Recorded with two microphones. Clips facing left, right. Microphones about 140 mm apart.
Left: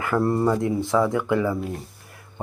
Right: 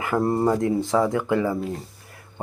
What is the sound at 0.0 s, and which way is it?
Speech, 20° right (ahead or behind).